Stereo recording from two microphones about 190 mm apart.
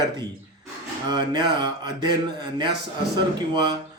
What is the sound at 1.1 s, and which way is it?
Speech, 20° right (ahead or behind).